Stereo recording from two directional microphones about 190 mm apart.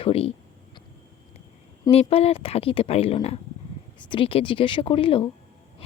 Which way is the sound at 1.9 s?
30° left (ahead or behind).